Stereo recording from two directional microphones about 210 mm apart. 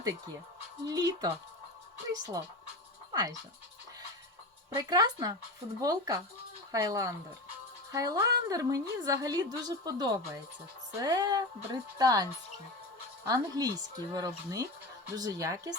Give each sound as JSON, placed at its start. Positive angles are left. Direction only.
{"t": 0.9, "sound": "a woman's voice", "side_deg": -20}
{"t": 4.7, "sound": "a woman's voice", "side_deg": -20}